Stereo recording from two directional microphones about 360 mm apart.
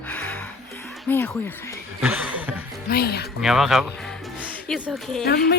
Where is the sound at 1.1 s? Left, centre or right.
Centre.